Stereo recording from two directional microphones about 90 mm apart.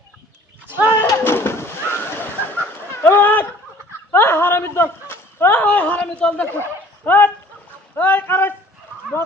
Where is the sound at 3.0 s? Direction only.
25° left (ahead or behind).